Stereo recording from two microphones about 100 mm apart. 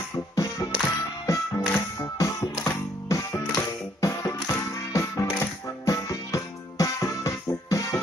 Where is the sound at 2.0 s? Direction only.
30° left (ahead or behind).